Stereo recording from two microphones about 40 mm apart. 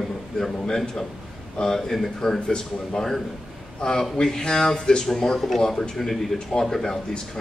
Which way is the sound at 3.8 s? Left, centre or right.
Centre.